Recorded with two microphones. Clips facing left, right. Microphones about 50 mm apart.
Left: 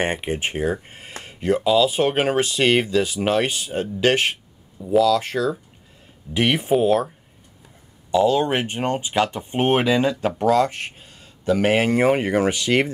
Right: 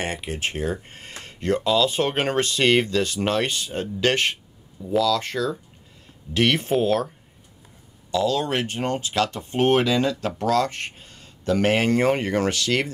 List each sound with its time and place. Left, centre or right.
0.0 s speech: left
0.7 s speech: centre
8.1 s speech: left